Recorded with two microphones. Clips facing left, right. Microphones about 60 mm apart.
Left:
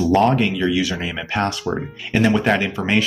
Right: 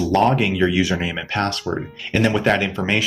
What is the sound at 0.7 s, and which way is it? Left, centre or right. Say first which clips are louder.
Speech: right 1 dB; right.